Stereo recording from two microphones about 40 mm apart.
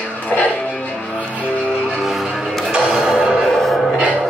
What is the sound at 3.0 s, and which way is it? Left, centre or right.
Music, centre.